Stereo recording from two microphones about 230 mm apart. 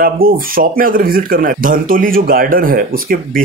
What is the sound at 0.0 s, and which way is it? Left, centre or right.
Speech, right.